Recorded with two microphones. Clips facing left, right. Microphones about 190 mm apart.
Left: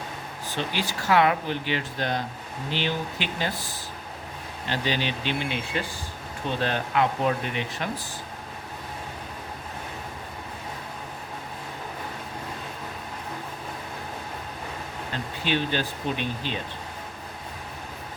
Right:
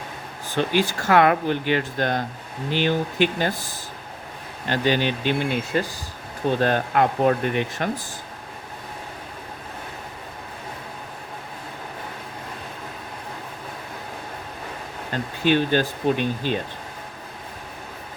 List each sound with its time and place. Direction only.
0.5 s speech: 50° right (ahead or behind)
15.1 s speech: 50° right (ahead or behind)